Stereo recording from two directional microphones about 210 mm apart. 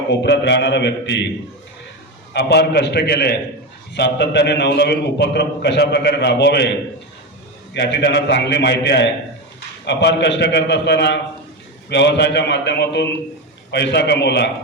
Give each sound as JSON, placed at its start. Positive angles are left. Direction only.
{"t": 0.1, "sound": "a man's voice", "side_deg": 55}
{"t": 2.3, "sound": "a man's voice", "side_deg": 50}